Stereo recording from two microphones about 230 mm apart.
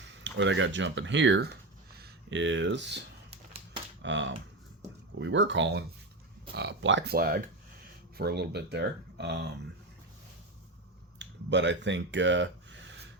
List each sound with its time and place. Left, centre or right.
0.0 s speech: right
4.0 s speech: right
11.2 s speech: right